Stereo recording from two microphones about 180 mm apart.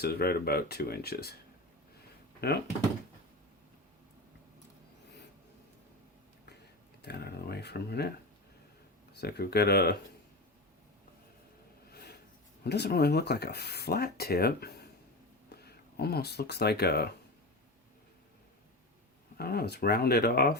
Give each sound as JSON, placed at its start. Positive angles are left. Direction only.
{"t": 0.0, "sound": "speech", "side_deg": 60}
{"t": 2.4, "sound": "speech", "side_deg": 65}
{"t": 7.0, "sound": "speech", "side_deg": 65}
{"t": 9.1, "sound": "speech", "side_deg": 60}
{"t": 11.9, "sound": "a sound", "side_deg": 60}
{"t": 12.6, "sound": "speech", "side_deg": 65}
{"t": 19.4, "sound": "speech", "side_deg": 60}